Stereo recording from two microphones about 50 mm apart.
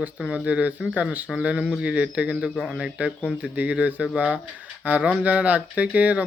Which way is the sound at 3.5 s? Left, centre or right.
Right.